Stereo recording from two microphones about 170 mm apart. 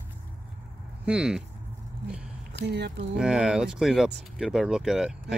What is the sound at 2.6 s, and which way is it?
Speech, 75° right (ahead or behind).